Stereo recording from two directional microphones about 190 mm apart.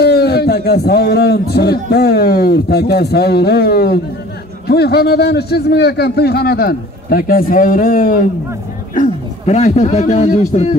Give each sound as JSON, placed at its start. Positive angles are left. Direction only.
{"t": 0.0, "sound": "a man's voice", "side_deg": 55}